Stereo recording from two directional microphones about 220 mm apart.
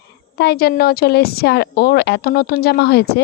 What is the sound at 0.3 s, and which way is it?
A woman's voice, 45° left (ahead or behind).